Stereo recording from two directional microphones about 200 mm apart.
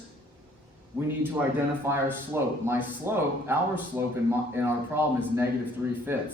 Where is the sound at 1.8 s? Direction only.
10° right (ahead or behind).